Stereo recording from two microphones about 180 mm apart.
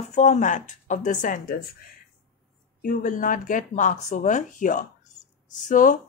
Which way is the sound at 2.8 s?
45° left (ahead or behind).